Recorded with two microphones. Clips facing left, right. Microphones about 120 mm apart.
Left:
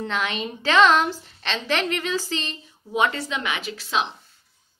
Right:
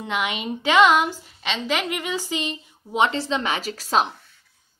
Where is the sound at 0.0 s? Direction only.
15° right (ahead or behind); by 4.1 s 45° right (ahead or behind).